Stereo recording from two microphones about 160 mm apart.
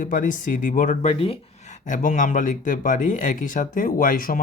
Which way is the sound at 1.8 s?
55° left (ahead or behind).